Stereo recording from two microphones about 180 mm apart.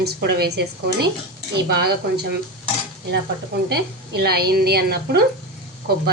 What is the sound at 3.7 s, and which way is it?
A woman's voice, 65° right (ahead or behind).